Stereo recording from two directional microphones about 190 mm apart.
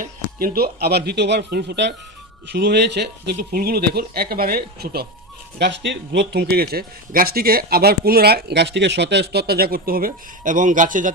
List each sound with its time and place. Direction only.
0.0 s speech: 50° right (ahead or behind)
5.5 s speech: 65° right (ahead or behind); by 11.1 s 45° right (ahead or behind)